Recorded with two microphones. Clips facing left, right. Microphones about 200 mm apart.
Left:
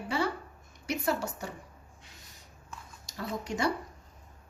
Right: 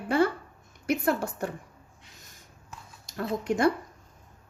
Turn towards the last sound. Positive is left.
turn(degrees=-55)  # may be behind; listen again after turning